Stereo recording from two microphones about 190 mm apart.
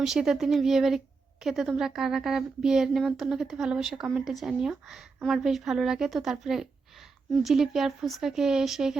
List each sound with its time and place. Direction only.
0.0 s a woman's voice: 5° right (ahead or behind)